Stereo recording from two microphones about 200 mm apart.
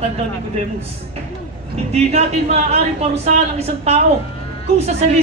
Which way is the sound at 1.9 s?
30° right (ahead or behind).